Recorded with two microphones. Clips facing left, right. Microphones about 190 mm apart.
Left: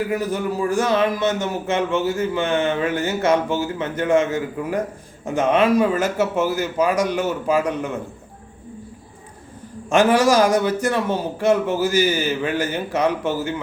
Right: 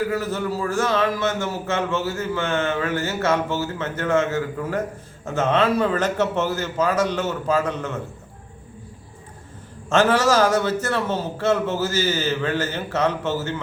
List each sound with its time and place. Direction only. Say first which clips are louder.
0.1 s a man's voice: left 2 dB; 15° left (ahead or behind)
9.9 s a man's voice: left 2 dB; 15° left (ahead or behind)